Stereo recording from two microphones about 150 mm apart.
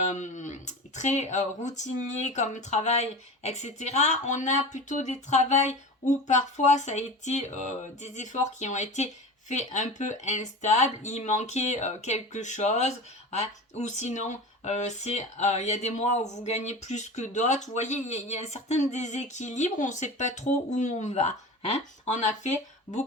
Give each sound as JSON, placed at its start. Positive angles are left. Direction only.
{"t": 0.1, "sound": "speech", "side_deg": 55}